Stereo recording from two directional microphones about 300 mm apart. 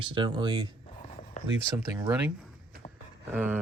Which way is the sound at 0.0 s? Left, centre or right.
Centre.